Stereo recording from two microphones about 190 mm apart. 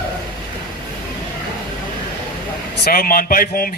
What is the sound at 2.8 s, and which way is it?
Speech, 50° left (ahead or behind).